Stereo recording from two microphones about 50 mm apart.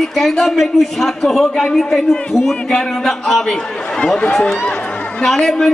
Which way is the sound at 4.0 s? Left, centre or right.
Left.